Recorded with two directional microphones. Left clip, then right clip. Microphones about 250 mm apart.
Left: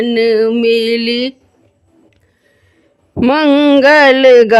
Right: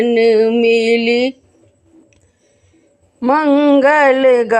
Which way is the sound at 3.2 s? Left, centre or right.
Left.